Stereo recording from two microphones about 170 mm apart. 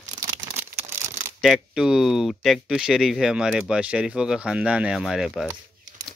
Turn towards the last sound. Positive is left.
turn(degrees=0)  # may be behind; listen again after turning